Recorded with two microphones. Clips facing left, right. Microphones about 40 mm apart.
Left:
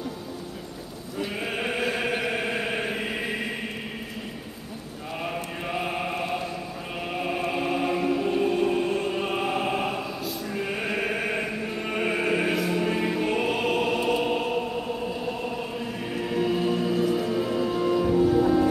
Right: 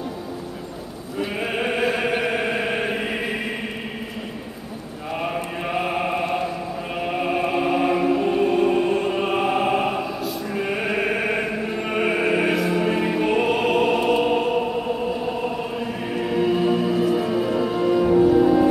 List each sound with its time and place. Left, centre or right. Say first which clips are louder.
1.2 s music: right 5 dB; centre
5.2 s chant: right 5 dB; centre
7.0 s music: right 6 dB; centre